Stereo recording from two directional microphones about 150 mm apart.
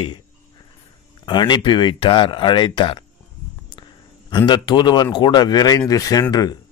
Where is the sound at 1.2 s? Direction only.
30° left (ahead or behind).